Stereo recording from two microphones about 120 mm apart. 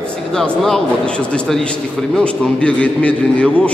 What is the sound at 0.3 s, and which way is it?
A man's voice, 5° left (ahead or behind).